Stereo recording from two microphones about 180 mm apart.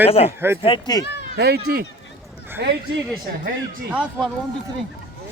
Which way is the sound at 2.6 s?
70° right (ahead or behind).